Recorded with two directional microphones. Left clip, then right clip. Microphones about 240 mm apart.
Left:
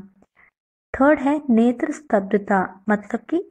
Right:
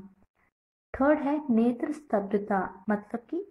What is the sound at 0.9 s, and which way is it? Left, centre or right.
Speech, left.